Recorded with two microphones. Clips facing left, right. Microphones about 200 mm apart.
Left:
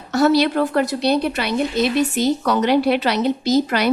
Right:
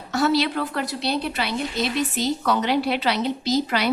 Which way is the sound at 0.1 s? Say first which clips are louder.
Left 5 dB; 45° left (ahead or behind).